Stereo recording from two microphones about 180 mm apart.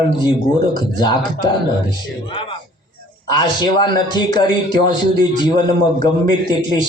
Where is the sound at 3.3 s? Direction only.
25° left (ahead or behind).